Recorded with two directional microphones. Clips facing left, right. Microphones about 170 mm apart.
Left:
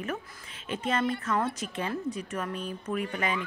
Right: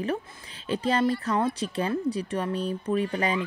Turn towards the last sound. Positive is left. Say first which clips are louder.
# right 5 dB
turn(degrees=-35)  # may be behind; listen again after turning